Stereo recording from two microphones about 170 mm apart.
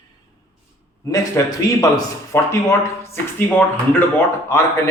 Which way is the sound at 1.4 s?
15° left (ahead or behind).